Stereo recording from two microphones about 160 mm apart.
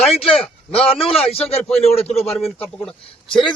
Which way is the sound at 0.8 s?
35° left (ahead or behind).